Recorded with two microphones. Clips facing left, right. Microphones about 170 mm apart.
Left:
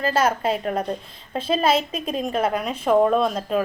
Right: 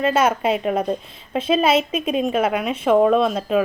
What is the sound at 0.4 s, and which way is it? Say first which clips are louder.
A woman's voice: right 3 dB; 10° right (ahead or behind).